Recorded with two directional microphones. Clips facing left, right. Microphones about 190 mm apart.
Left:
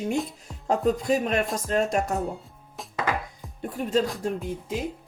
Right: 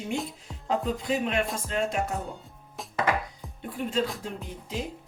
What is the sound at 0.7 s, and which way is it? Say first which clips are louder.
Speech: left 5 dB; 45° left (ahead or behind).